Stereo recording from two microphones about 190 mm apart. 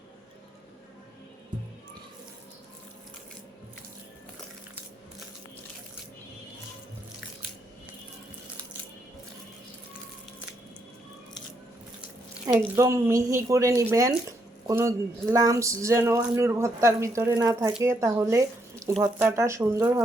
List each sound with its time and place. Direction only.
12.5 s speech: 15° right (ahead or behind)